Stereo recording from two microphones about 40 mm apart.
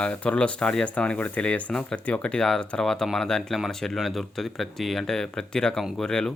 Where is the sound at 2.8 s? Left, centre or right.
Centre.